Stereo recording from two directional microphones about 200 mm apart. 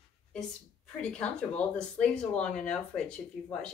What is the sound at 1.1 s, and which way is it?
Speech, 5° left (ahead or behind).